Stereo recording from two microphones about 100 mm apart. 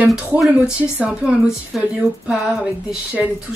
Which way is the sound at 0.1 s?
5° right (ahead or behind).